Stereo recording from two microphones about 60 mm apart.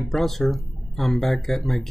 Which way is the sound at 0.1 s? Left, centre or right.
Centre.